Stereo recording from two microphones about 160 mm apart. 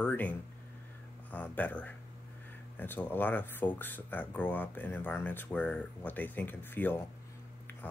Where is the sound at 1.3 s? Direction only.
10° left (ahead or behind).